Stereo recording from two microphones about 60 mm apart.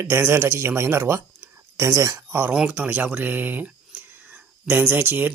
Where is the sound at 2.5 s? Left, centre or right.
Centre.